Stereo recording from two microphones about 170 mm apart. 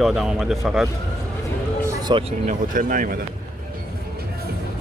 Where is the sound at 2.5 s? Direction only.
55° right (ahead or behind).